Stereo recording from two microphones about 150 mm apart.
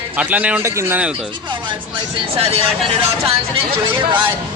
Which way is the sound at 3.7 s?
35° right (ahead or behind).